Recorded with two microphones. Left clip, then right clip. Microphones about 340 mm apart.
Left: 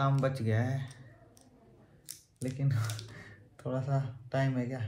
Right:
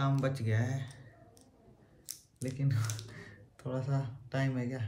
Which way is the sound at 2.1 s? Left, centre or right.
Centre.